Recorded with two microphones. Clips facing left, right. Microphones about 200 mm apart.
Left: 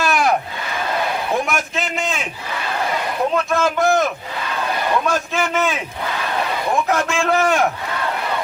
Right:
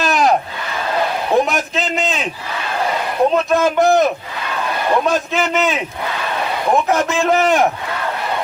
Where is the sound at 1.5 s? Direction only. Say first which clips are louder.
Right 3 dB; 20° right (ahead or behind).